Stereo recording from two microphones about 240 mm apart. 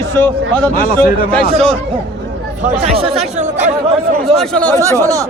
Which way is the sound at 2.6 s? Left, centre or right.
Right.